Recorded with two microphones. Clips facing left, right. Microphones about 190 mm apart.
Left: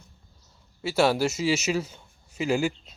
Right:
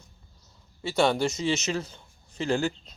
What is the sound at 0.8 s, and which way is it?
A man's voice, 5° left (ahead or behind).